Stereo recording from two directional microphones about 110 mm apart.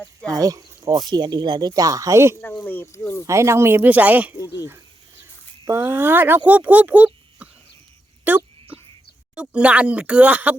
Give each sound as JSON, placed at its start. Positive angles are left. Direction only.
{"t": 0.0, "sound": "speech", "side_deg": 10}
{"t": 0.3, "sound": "speech", "side_deg": -35}
{"t": 2.4, "sound": "speech", "side_deg": 20}
{"t": 3.2, "sound": "speech", "side_deg": -25}